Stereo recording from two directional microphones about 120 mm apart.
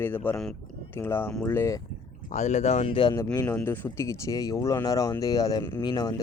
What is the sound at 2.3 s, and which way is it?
Speech, 85° left.